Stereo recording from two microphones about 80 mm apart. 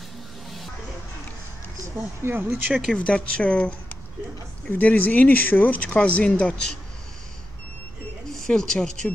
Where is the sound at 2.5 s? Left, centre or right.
Centre.